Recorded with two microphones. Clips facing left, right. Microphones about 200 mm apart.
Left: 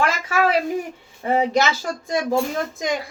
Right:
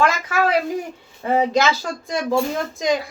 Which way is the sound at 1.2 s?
25° left (ahead or behind).